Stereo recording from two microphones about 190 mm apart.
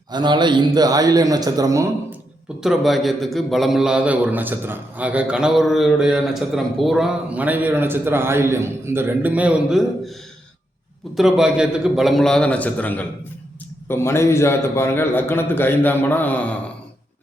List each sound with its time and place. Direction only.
0.1 s speech: 25° right (ahead or behind)
2.6 s a man's voice: centre (ahead or behind)
11.2 s a man's voice: 5° right (ahead or behind)